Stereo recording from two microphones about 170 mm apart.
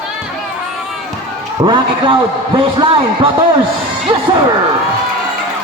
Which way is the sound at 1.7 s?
30° right (ahead or behind).